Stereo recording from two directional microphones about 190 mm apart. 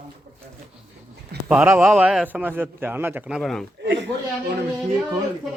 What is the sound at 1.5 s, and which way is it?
A man's voice, 5° right (ahead or behind).